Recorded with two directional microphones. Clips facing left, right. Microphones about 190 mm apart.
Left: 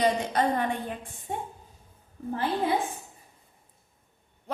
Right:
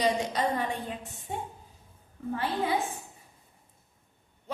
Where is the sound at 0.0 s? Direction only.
55° left (ahead or behind).